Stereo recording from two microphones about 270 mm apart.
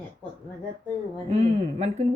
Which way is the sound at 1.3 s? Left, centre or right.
Right.